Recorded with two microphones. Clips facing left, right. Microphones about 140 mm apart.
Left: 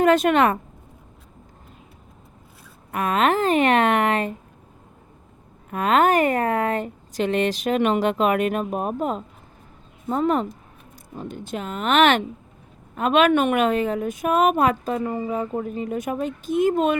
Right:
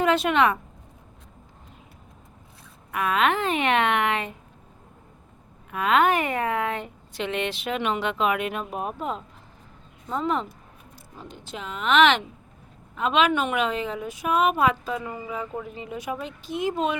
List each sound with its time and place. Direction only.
0.0 s speech: 45° left (ahead or behind)
2.9 s speech: 40° left (ahead or behind)
5.7 s a woman's voice: 40° left (ahead or behind)